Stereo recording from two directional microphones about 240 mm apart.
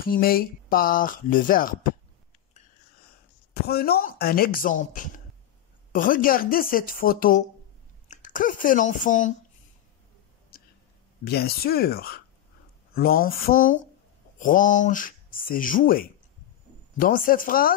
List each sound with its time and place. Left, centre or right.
0.0 s speech: left
3.6 s speech: left
10.5 s whispering: left
11.2 s speech: left